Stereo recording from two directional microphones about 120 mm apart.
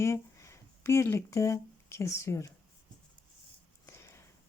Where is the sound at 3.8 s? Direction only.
25° left (ahead or behind).